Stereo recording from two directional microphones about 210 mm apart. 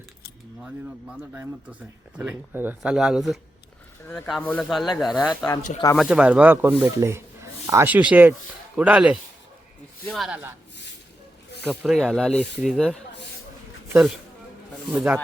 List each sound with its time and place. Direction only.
0.6 s speech: 5° right (ahead or behind)
11.6 s speech: 5° right (ahead or behind)
13.8 s speech: 10° right (ahead or behind)